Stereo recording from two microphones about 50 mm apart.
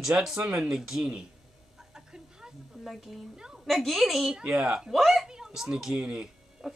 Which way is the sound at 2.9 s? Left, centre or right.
Centre.